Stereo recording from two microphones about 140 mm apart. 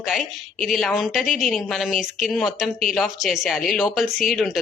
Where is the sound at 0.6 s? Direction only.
Centre (ahead or behind).